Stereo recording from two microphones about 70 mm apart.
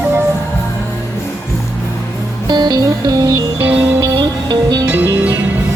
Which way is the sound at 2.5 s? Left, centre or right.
Right.